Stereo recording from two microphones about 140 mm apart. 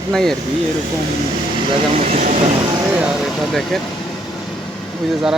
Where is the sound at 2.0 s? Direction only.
55° right (ahead or behind).